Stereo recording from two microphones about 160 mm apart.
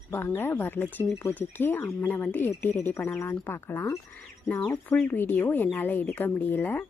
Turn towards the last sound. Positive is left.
turn(degrees=10)  # may be behind; listen again after turning